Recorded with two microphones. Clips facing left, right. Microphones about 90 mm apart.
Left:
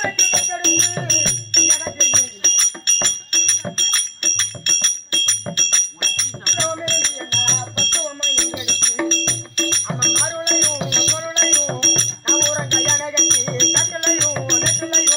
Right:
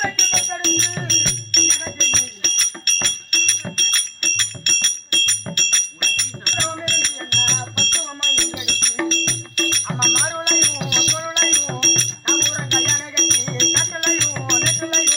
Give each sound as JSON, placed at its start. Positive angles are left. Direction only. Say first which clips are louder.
{"t": 0.0, "sound": "music", "louder": "even", "side_deg": 30}